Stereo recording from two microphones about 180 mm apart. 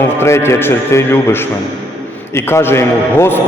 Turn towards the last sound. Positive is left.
turn(degrees=15)  # may be behind; listen again after turning